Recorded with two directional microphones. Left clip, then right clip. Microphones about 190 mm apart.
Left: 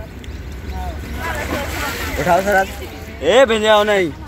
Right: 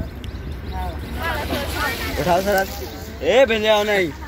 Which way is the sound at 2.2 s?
5° left (ahead or behind).